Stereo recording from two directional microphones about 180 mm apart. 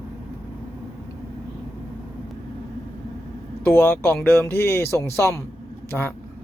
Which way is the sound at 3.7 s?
10° left (ahead or behind).